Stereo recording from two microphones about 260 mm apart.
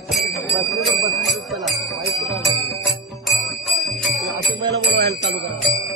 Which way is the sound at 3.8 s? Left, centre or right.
Centre.